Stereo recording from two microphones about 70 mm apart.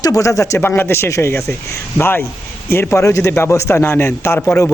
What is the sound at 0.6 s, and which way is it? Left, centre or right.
A man's voice, left.